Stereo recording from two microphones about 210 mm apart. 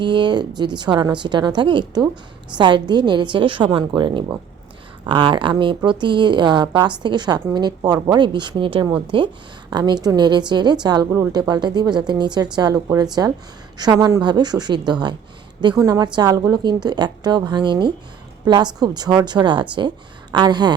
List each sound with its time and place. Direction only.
0.0 s speech: 20° right (ahead or behind)